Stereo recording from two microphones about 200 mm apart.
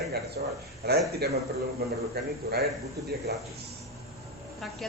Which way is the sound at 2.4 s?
50° right (ahead or behind).